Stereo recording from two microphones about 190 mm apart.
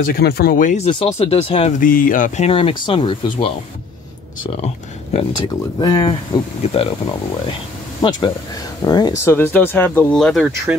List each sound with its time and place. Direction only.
0.0 s speech: 55° left (ahead or behind)
0.8 s speech: 25° left (ahead or behind)
1.8 s speech: 45° left (ahead or behind); by 3.5 s 25° left (ahead or behind)
5.1 s speech: 25° left (ahead or behind)
8.0 s speech: 25° left (ahead or behind); by 10.8 s centre (ahead or behind)